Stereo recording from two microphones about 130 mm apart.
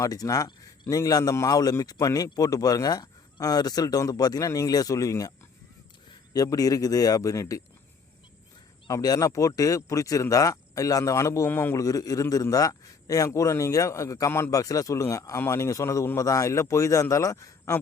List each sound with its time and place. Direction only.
0.0 s speech: 25° left (ahead or behind)
6.3 s speech: 30° left (ahead or behind)
8.9 s speech: 30° left (ahead or behind)